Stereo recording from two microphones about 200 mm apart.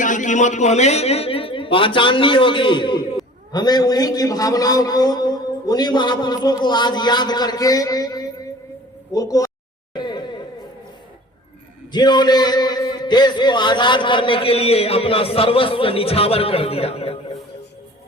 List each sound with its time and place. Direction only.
0.0 s a man's voice: 40° left (ahead or behind); by 9.5 s 15° left (ahead or behind)
9.9 s a sound: 20° left (ahead or behind)
11.9 s a man's voice: 20° left (ahead or behind)